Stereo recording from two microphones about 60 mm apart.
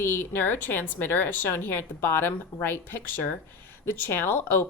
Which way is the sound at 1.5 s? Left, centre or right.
Left.